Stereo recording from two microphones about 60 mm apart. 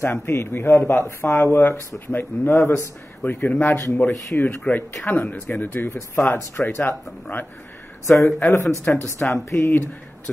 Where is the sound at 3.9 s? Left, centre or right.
Left.